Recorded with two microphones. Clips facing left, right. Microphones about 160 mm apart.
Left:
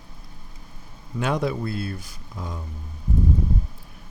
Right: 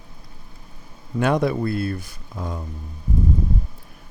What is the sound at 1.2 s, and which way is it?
Speech, 60° right (ahead or behind).